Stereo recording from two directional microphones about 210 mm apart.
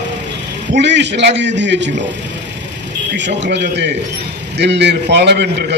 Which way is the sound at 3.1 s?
55° right (ahead or behind).